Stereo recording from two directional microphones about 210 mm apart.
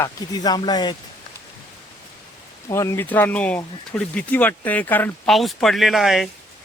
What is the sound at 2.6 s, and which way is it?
A man's voice, 15° left (ahead or behind).